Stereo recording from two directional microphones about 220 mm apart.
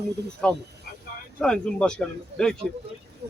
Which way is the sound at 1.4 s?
5° left (ahead or behind).